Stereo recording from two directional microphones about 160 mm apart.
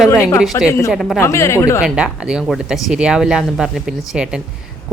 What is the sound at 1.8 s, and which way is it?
Speech, 5° right (ahead or behind).